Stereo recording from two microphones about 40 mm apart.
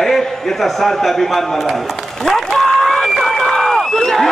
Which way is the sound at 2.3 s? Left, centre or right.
Centre.